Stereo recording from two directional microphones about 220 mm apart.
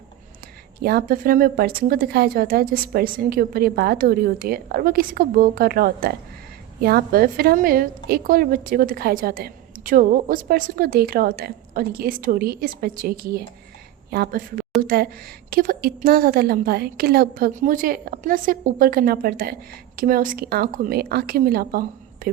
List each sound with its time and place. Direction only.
0.8 s a woman's voice: 45° right (ahead or behind)